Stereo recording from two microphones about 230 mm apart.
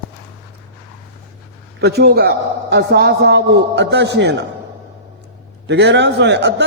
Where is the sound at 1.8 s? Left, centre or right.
Right.